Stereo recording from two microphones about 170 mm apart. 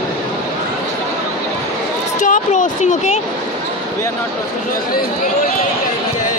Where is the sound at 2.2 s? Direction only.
50° left (ahead or behind).